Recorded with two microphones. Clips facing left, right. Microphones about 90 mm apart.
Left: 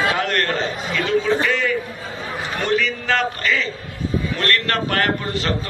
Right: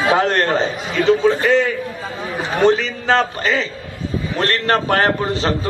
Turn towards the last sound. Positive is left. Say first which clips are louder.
# right 4 dB
turn(degrees=-25)  # may be behind; listen again after turning